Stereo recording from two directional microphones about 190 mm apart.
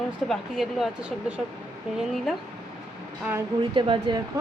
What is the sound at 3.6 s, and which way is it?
Speech, 25° right (ahead or behind).